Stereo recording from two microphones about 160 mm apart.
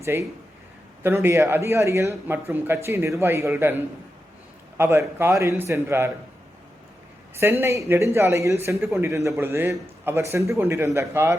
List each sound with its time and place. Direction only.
0.0 s speech: 15° right (ahead or behind)
7.3 s speech: 15° right (ahead or behind)